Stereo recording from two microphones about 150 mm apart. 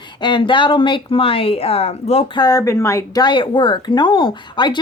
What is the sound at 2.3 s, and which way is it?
A woman's voice, 25° left (ahead or behind).